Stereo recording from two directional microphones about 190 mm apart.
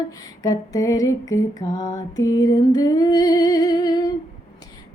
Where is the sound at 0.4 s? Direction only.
15° left (ahead or behind).